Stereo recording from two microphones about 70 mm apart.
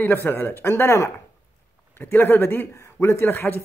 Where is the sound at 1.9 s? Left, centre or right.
Left.